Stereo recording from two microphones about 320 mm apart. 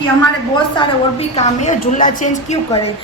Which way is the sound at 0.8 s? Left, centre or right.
Centre.